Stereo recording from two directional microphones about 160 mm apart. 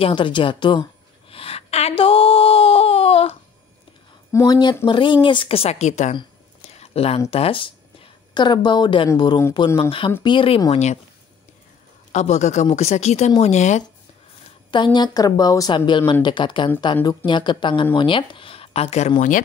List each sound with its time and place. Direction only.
0.0 s speech: 30° left (ahead or behind)
1.3 s a sound: 35° left (ahead or behind)
4.3 s a woman's voice: 20° left (ahead or behind); by 6.1 s 45° left (ahead or behind)
6.7 s a sound: 40° left (ahead or behind)
7.2 s a woman's voice: 35° left (ahead or behind)
12.1 s speech: 45° left (ahead or behind)
14.7 s a woman's voice: 30° left (ahead or behind); by 19.4 s 55° left (ahead or behind)